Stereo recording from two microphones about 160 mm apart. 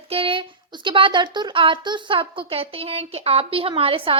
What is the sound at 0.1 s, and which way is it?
A woman's voice, 35° right (ahead or behind).